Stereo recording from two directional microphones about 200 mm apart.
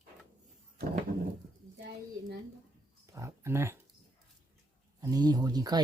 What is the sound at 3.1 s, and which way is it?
Speech, 15° right (ahead or behind).